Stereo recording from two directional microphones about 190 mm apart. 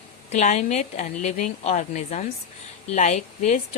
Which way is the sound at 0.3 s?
35° left (ahead or behind).